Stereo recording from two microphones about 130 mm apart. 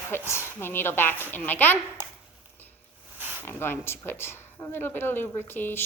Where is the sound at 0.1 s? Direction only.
20° left (ahead or behind).